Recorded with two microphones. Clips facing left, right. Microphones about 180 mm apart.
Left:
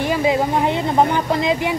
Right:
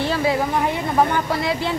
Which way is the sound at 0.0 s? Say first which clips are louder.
Left 2 dB; 15° left (ahead or behind).